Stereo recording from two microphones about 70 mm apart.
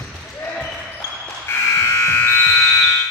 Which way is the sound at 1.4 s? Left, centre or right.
Left.